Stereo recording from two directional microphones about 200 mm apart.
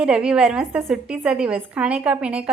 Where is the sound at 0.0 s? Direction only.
5° right (ahead or behind).